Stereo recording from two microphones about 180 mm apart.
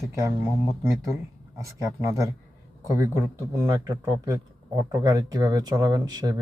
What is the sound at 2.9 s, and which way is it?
Speech, 20° right (ahead or behind).